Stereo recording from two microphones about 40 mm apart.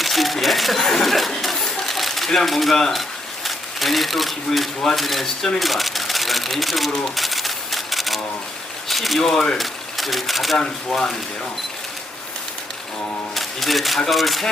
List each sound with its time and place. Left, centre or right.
0.0 s camera: centre
1.4 s a sound: centre
2.0 s typewriter: centre
2.9 s speech: centre
7.2 s typewriter: centre
8.9 s speech: centre
10.6 s speech: left
13.3 s speech: centre